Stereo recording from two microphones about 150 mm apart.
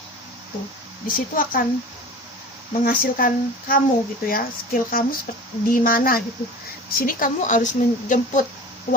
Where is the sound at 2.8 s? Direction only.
75° left (ahead or behind).